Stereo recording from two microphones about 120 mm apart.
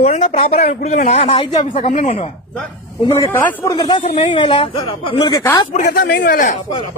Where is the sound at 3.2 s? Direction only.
15° left (ahead or behind).